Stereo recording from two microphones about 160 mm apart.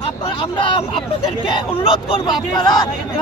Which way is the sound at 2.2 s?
25° left (ahead or behind).